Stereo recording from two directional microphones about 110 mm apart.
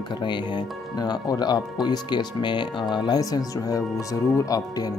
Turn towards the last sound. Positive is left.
turn(degrees=35)  # may be behind; listen again after turning